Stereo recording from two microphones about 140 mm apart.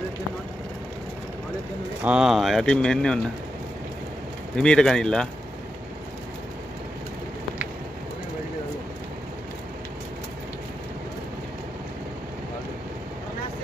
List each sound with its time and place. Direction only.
2.0 s speech: 5° right (ahead or behind)
4.6 s speech: 5° left (ahead or behind)